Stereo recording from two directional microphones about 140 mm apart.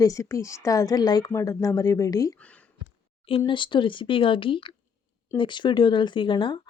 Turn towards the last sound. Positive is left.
turn(degrees=35)  # may be behind; listen again after turning